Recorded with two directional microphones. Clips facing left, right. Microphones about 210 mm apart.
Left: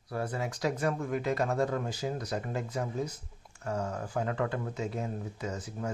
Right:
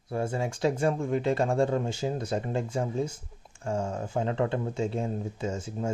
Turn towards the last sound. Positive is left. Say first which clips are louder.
# right 5 dB
turn(degrees=-25)  # may be behind; listen again after turning